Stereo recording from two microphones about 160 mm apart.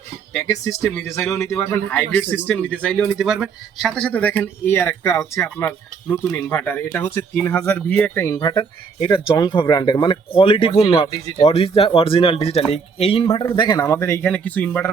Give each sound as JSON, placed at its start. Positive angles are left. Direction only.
{"t": 0.3, "sound": "speech", "side_deg": 15}
{"t": 13.4, "sound": "speech", "side_deg": 25}